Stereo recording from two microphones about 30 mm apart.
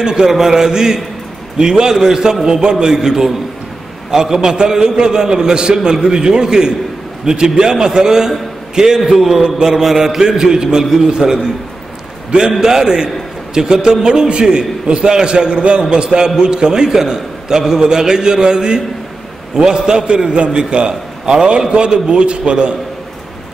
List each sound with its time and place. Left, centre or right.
0.0 s a man's voice: centre
9.1 s a man's voice: centre
9.4 s a man's voice: right
10.8 s a man's voice: centre
12.4 s a man's voice: right